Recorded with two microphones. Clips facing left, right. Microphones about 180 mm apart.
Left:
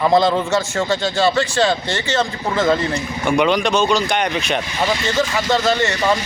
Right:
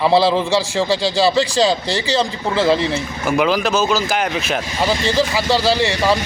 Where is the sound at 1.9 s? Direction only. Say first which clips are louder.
Right 2 dB; 35° right (ahead or behind).